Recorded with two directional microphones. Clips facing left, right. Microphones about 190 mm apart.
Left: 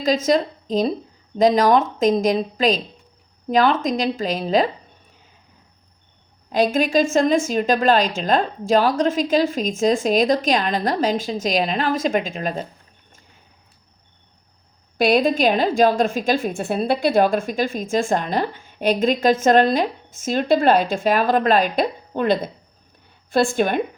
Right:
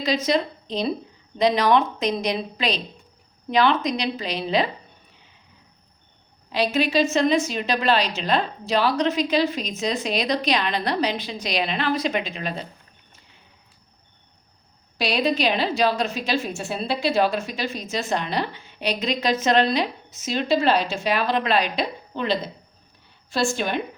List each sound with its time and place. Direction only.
0.0 s a woman's voice: 45° left (ahead or behind)
6.5 s a woman's voice: 45° left (ahead or behind)
14.9 s a woman's voice: 50° left (ahead or behind)